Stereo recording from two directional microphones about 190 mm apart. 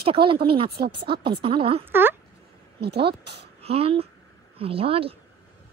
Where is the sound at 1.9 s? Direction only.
10° right (ahead or behind).